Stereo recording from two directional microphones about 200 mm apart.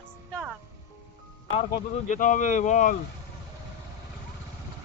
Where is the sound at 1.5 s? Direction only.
35° left (ahead or behind).